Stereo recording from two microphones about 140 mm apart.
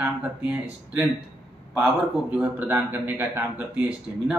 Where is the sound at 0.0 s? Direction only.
10° right (ahead or behind).